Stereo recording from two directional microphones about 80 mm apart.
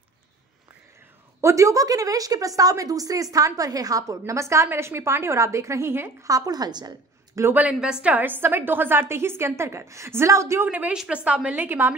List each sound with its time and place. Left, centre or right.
1.4 s a woman's voice: right
6.2 s a woman's voice: right
7.5 s a woman's voice: centre; by 10.7 s right
10.7 s a woman's voice: centre